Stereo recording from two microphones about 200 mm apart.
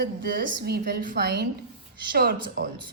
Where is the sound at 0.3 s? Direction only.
50° right (ahead or behind).